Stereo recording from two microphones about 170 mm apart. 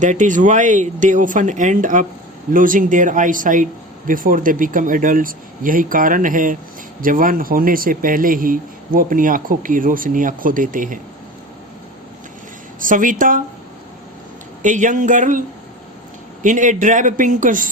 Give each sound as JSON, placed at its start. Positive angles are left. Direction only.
{"t": 0.0, "sound": "speech", "side_deg": -45}
{"t": 12.8, "sound": "speech", "side_deg": -50}
{"t": 14.6, "sound": "speech", "side_deg": -45}
{"t": 16.4, "sound": "speech", "side_deg": -45}